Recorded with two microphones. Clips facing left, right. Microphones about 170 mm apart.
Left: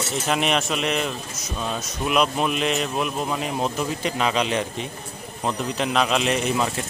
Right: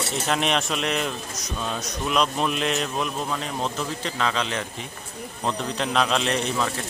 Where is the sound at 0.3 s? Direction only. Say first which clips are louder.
Left 2 dB; 5° left (ahead or behind).